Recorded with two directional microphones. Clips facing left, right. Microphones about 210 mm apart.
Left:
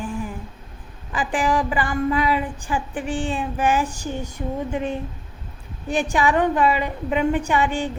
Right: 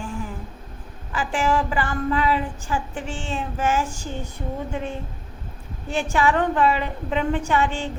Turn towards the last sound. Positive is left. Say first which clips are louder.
# left 1 dB
turn(degrees=15)  # may be behind; listen again after turning